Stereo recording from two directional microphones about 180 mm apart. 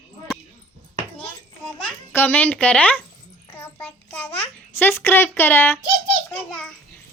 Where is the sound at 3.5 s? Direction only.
10° left (ahead or behind).